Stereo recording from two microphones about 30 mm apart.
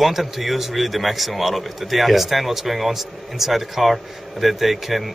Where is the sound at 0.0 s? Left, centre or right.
Centre.